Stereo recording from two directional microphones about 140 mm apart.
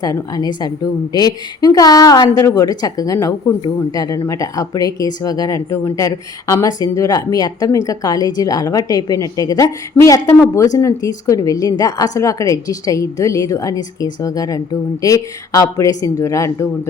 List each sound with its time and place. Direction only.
0.0 s speech: 25° left (ahead or behind)